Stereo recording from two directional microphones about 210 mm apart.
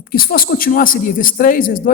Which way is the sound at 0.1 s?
45° left (ahead or behind).